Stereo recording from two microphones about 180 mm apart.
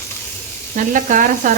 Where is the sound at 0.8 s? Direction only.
45° right (ahead or behind).